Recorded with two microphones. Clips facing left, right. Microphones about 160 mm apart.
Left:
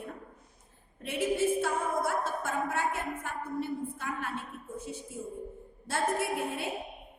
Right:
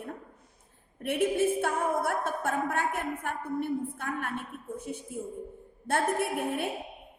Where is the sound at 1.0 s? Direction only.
60° right (ahead or behind).